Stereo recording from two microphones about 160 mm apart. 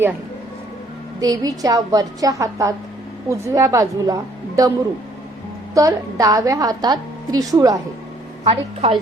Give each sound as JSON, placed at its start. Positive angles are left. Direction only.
{"t": 1.2, "sound": "a woman's voice", "side_deg": -20}
{"t": 5.7, "sound": "a woman's voice", "side_deg": -20}
{"t": 8.4, "sound": "a woman's voice", "side_deg": -40}